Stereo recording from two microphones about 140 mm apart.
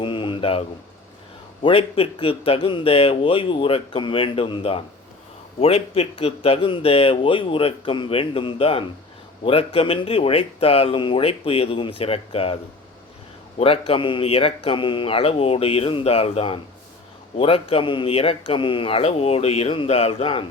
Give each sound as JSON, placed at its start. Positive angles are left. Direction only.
{"t": 0.0, "sound": "a sound", "side_deg": 35}
{"t": 1.6, "sound": "speech", "side_deg": 40}
{"t": 13.6, "sound": "speech", "side_deg": 45}